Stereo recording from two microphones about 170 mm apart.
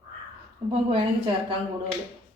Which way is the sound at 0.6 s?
35° right (ahead or behind).